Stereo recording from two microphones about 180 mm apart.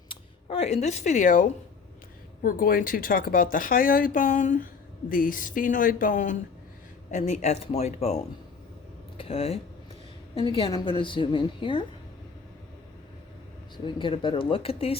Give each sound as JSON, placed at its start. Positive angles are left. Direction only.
{"t": 0.1, "sound": "a woman's voice", "side_deg": 35}
{"t": 13.7, "sound": "a woman's voice", "side_deg": 25}